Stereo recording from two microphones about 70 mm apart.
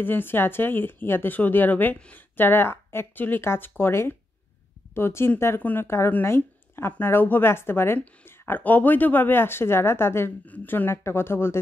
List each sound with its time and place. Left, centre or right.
0.0 s speech: left
2.3 s speech: left
5.9 s speech: left
10.4 s speech: left